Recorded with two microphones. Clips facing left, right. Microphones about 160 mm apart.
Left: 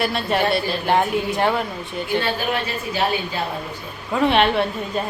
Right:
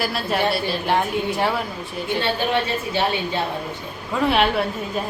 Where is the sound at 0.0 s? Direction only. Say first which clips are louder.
Left 1 dB; centre (ahead or behind).